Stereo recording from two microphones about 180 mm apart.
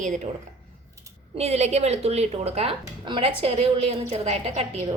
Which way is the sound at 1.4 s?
35° right (ahead or behind).